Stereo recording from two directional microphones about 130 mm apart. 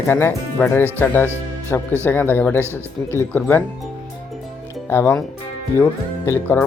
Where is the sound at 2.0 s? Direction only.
15° left (ahead or behind).